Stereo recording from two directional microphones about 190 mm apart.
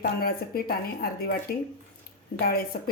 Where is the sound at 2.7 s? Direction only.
50° left (ahead or behind).